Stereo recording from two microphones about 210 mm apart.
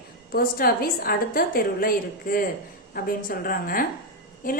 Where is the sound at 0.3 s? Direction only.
45° left (ahead or behind).